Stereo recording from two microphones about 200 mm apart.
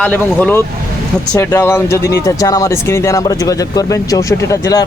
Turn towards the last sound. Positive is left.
turn(degrees=20)  # may be behind; listen again after turning